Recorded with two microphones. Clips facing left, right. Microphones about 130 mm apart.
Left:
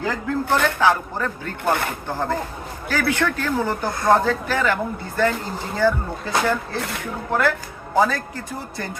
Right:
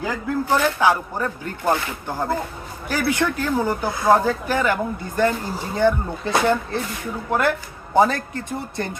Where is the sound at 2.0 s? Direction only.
10° right (ahead or behind).